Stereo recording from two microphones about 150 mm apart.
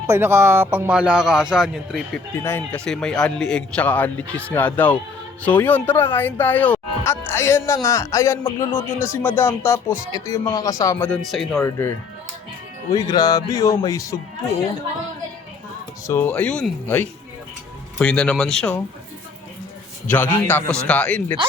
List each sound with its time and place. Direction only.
0.1 s speech: 15° right (ahead or behind); by 2.0 s centre (ahead or behind)
2.4 s speech: 15° left (ahead or behind)
11.3 s speech: centre (ahead or behind)
11.6 s speech: 15° left (ahead or behind)
16.0 s speech: 15° left (ahead or behind)
20.1 s speech: 10° left (ahead or behind)